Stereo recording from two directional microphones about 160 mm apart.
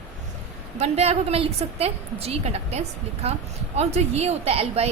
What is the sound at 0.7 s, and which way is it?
A woman's voice, 40° right (ahead or behind).